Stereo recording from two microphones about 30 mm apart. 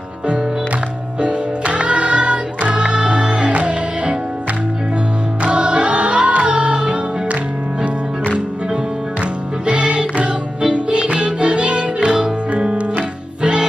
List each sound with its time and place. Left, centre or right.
1.2 s music: right
5.4 s music: right
9.2 s music: right